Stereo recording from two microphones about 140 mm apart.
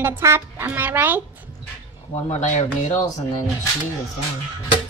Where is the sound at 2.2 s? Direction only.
50° left (ahead or behind).